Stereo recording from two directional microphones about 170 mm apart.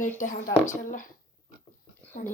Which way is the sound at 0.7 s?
50° left (ahead or behind).